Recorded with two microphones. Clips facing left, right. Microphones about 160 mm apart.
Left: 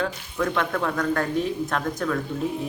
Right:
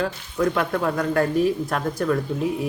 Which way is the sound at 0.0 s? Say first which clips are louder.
Right 3 dB; 5° right (ahead or behind).